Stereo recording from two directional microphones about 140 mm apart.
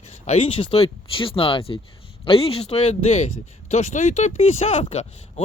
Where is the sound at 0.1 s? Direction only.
50° left (ahead or behind).